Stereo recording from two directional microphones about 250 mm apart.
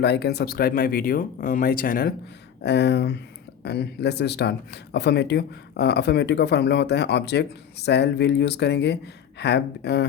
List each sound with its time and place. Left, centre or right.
0.0 s speech: left